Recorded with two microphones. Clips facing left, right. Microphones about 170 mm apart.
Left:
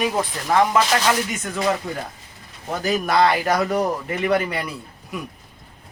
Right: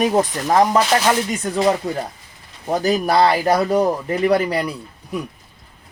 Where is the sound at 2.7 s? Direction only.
35° right (ahead or behind).